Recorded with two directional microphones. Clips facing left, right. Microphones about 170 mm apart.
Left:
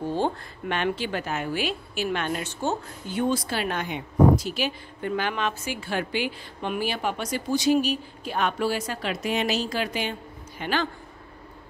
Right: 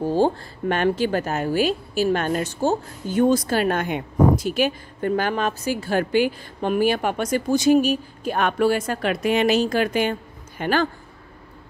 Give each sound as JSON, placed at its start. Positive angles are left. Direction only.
{"t": 0.1, "sound": "a woman's voice", "side_deg": -40}